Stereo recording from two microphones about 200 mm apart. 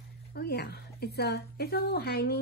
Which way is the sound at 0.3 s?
55° left (ahead or behind).